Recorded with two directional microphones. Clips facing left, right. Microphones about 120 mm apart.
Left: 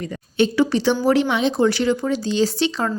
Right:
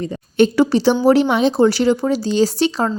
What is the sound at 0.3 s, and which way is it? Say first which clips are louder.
A woman's voice: right 4 dB; 45° right (ahead or behind).